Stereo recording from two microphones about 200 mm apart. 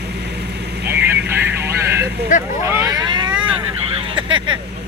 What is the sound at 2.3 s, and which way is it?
Speech, 40° left (ahead or behind).